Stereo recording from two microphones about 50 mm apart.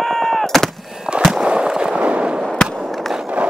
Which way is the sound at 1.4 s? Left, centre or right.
Centre.